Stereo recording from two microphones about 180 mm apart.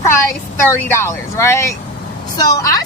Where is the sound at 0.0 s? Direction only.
15° left (ahead or behind).